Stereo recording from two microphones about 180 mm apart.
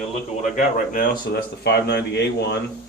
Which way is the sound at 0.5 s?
50° left (ahead or behind).